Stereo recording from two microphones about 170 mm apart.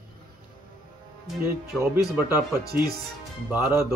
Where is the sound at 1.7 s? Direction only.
15° right (ahead or behind).